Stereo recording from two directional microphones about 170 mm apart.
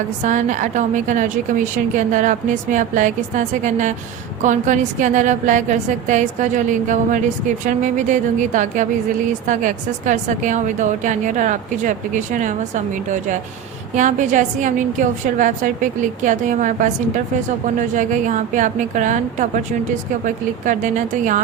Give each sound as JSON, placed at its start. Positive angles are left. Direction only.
{"t": 0.3, "sound": "a woman's voice", "side_deg": -45}